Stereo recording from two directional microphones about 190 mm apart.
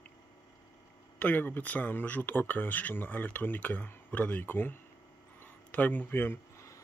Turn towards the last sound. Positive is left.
turn(degrees=10)  # may be behind; listen again after turning